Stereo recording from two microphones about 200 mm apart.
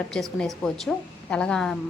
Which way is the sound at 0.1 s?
5° left (ahead or behind).